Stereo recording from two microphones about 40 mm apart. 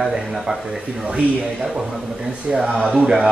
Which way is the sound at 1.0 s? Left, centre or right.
Right.